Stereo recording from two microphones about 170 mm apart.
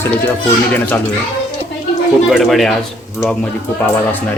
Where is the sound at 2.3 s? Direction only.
Centre (ahead or behind).